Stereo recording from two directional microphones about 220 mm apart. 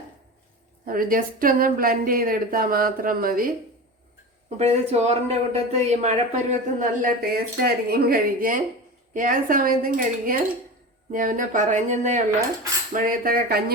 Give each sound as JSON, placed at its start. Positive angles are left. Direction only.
{"t": 0.9, "sound": "speech", "side_deg": -40}